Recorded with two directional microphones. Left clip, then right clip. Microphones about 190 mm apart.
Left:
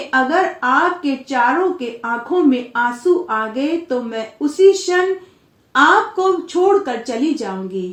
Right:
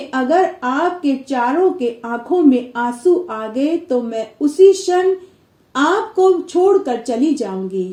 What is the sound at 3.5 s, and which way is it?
Speech, 30° right (ahead or behind).